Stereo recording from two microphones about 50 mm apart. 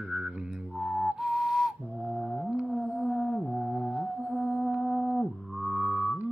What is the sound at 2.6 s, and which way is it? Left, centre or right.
Music, centre.